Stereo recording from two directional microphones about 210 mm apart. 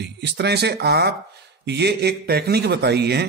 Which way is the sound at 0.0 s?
55° right (ahead or behind).